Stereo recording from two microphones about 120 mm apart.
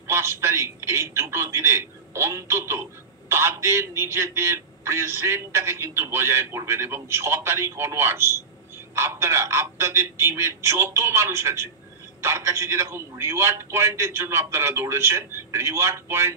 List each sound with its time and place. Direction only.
0.0 s a man's voice: 20° right (ahead or behind)